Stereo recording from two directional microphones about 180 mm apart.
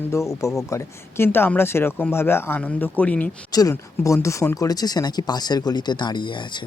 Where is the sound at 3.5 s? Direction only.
20° left (ahead or behind).